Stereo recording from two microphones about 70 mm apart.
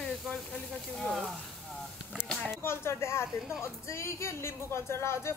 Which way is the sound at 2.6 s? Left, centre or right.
Left.